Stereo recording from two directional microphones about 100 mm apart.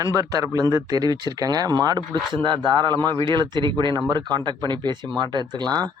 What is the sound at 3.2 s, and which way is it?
Speech, 50° right (ahead or behind).